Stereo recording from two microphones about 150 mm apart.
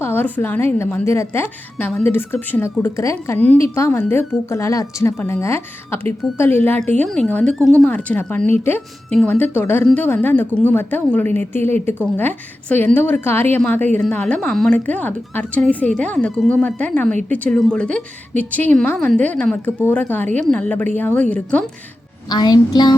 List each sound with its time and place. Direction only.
0.0 s a woman's voice: 15° left (ahead or behind)
22.3 s a child's voice: 25° left (ahead or behind)